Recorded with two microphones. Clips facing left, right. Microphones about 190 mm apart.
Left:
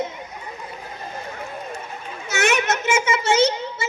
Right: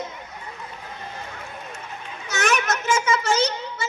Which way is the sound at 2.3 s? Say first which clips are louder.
Left 3 dB; 25° left (ahead or behind).